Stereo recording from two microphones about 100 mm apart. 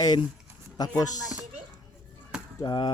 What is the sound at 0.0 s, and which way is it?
Speech, 45° left (ahead or behind).